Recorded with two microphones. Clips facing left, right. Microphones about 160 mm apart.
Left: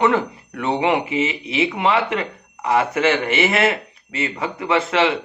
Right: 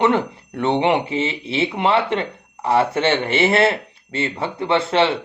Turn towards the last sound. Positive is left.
turn(degrees=-30)  # may be behind; listen again after turning